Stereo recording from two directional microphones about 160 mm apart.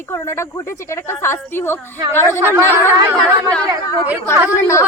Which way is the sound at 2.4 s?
15° right (ahead or behind).